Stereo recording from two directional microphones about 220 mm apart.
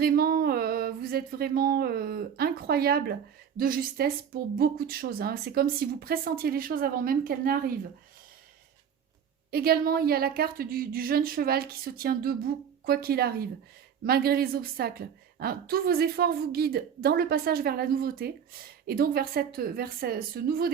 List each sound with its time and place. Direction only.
0.0 s a sound: 40° right (ahead or behind)
3.6 s a woman's voice: 40° right (ahead or behind)
9.5 s a woman's voice: 45° right (ahead or behind)